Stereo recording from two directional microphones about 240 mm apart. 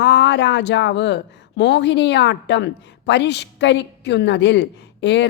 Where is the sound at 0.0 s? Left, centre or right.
Left.